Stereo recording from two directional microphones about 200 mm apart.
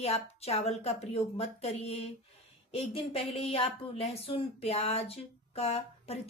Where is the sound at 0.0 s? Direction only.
30° left (ahead or behind).